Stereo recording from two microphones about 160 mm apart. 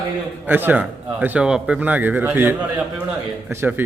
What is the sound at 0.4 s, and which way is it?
Speech, 10° right (ahead or behind).